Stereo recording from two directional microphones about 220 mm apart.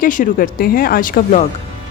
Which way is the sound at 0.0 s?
35° left (ahead or behind).